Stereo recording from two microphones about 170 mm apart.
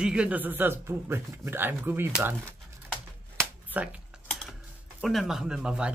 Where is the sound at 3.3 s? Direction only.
10° right (ahead or behind).